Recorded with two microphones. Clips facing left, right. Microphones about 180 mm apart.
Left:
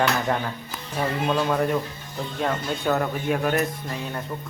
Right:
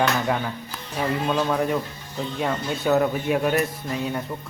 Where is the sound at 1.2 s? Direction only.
Centre (ahead or behind).